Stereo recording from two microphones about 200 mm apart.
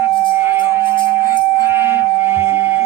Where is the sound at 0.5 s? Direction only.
10° right (ahead or behind).